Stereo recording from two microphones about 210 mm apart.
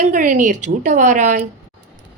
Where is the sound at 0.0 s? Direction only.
40° right (ahead or behind).